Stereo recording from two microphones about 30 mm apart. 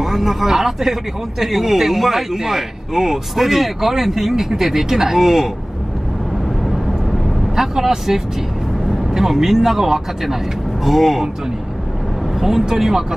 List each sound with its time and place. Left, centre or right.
0.0 s speech: centre
7.5 s speech: centre
12.4 s speech: centre